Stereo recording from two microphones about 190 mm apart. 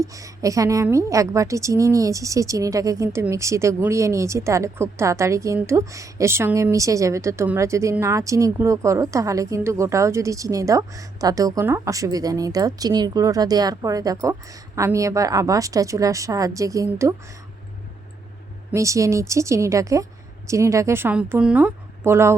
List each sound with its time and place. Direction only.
0.0 s a woman's voice: 15° right (ahead or behind)
18.7 s a woman's voice: 15° right (ahead or behind)